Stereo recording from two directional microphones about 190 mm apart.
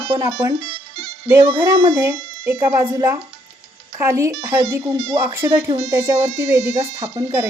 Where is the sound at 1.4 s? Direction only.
25° right (ahead or behind).